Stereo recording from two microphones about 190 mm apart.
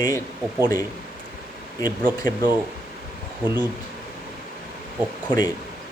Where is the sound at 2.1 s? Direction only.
20° left (ahead or behind).